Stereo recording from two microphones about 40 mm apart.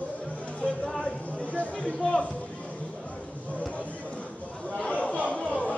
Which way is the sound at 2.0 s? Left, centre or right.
Left.